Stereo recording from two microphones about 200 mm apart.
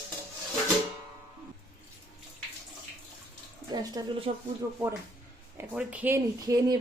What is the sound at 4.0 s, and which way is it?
Speech, 20° right (ahead or behind).